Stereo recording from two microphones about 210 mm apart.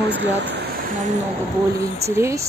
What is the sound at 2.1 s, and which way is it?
Speech, 15° right (ahead or behind).